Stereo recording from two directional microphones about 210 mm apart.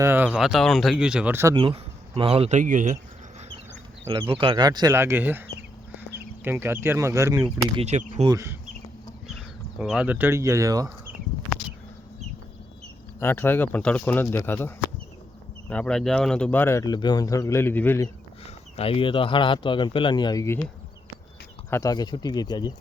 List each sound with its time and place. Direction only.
0.0 s speech: 10° right (ahead or behind)
1.5 s speech: 25° right (ahead or behind)
4.0 s speech: 25° right (ahead or behind)
6.1 s chicken: 10° right (ahead or behind)
6.8 s speech: 10° right (ahead or behind)
7.8 s speech: 35° right (ahead or behind)
8.3 s speech: 15° right (ahead or behind)
9.2 s speech: centre (ahead or behind)
13.1 s speech: 10° left (ahead or behind)
15.7 s speech: 5° left (ahead or behind)
18.8 s speech: 25° left (ahead or behind)
21.7 s speech: 15° left (ahead or behind)